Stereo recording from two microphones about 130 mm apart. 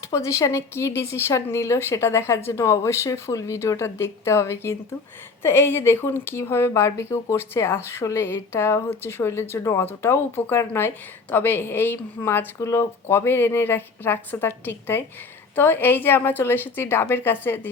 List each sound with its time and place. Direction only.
0.1 s a woman's voice: 20° left (ahead or behind)